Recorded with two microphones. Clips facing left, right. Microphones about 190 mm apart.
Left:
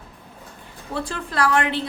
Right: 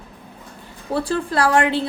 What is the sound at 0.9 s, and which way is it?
Speech, 35° right (ahead or behind).